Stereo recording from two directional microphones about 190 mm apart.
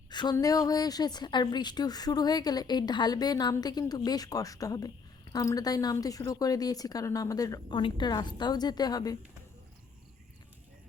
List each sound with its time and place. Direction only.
0.1 s a woman's voice: 20° left (ahead or behind)